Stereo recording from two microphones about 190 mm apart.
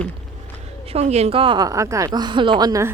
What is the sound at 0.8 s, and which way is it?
A woman's voice, 35° right (ahead or behind).